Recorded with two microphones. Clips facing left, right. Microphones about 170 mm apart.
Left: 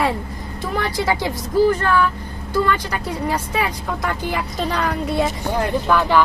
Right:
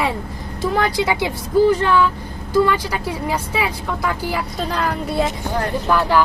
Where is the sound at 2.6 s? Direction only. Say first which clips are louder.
Right 2 dB; 10° right (ahead or behind).